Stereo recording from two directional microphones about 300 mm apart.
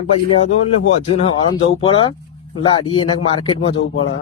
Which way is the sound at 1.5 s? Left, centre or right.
Centre.